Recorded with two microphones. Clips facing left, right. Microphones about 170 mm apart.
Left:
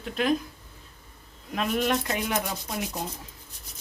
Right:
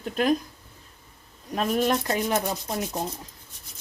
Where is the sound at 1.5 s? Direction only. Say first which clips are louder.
Right 2 dB; 40° right (ahead or behind).